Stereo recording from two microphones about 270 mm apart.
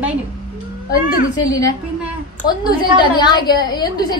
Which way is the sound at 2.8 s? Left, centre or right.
Centre.